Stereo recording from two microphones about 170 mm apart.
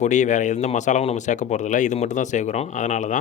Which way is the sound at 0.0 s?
45° left (ahead or behind).